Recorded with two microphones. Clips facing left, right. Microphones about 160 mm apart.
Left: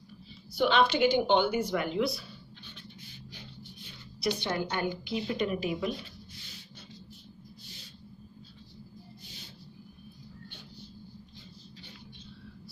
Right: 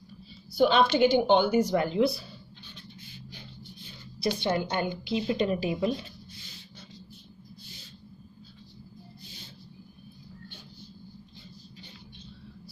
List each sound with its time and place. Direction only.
0.6 s a woman's voice: 40° right (ahead or behind)
4.4 s a woman's voice: 25° right (ahead or behind)